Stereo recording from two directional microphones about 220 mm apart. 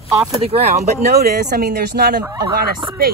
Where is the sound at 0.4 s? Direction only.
25° right (ahead or behind).